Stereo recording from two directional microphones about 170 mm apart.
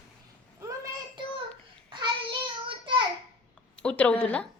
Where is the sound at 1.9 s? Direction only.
25° right (ahead or behind).